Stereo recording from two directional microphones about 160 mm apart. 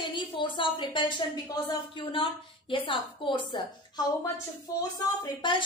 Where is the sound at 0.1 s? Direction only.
30° left (ahead or behind).